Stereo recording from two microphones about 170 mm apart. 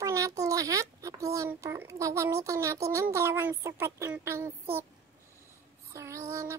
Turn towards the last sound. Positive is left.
turn(degrees=-15)  # may be behind; listen again after turning